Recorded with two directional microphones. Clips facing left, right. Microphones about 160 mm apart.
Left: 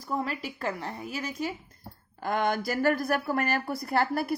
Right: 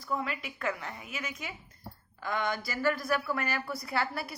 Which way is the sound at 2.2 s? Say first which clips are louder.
Left 5 dB; 50° left (ahead or behind).